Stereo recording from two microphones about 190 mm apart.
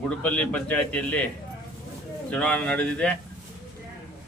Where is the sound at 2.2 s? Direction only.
5° left (ahead or behind).